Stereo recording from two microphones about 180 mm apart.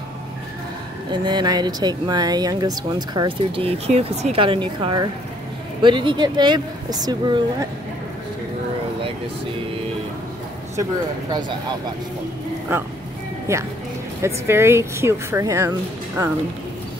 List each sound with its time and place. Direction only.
1.1 s speech: 25° right (ahead or behind)
10.8 s speech: 20° right (ahead or behind)
13.5 s speech: 15° right (ahead or behind)